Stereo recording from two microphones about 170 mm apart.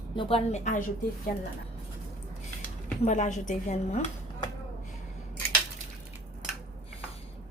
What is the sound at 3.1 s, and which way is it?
Speech, 45° left (ahead or behind).